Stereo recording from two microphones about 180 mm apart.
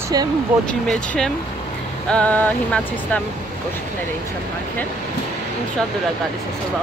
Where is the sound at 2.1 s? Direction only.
10° left (ahead or behind).